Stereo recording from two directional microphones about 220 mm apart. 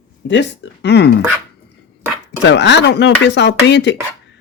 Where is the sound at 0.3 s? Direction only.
55° left (ahead or behind).